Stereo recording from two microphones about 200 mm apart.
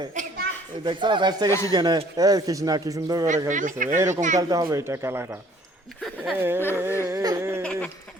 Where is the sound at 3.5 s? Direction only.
40° right (ahead or behind).